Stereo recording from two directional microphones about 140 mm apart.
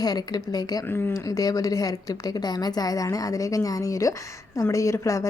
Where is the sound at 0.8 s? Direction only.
15° left (ahead or behind).